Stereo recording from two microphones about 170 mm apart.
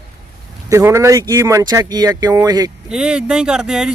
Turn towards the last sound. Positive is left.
turn(degrees=-5)  # may be behind; listen again after turning